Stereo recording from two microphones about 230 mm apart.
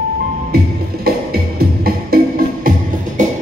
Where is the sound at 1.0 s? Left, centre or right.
Right.